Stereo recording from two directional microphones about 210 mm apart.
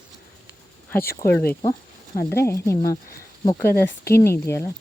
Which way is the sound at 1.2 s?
10° left (ahead or behind).